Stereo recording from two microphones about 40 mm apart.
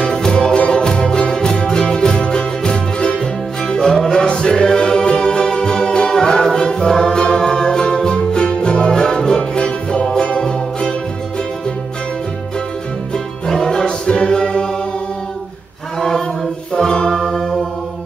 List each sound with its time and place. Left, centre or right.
0.0 s music: centre
13.1 s music: centre
16.0 s a capella: centre
16.7 s music: centre